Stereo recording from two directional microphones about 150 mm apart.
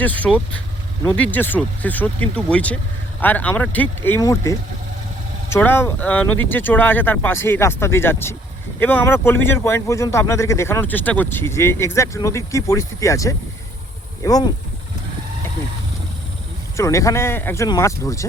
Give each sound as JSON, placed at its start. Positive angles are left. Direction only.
{"t": 0.0, "sound": "speech", "side_deg": 10}
{"t": 16.7, "sound": "speech", "side_deg": 20}